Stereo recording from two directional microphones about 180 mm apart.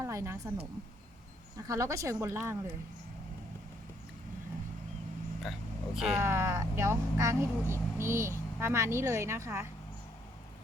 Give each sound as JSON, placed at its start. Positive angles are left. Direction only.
{"t": 0.0, "sound": "a woman's voice", "side_deg": -15}
{"t": 1.5, "sound": "speech", "side_deg": -20}
{"t": 5.4, "sound": "speech", "side_deg": 0}
{"t": 6.1, "sound": "speech", "side_deg": -15}